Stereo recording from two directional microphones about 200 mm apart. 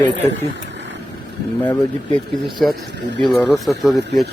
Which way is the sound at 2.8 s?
60° right (ahead or behind).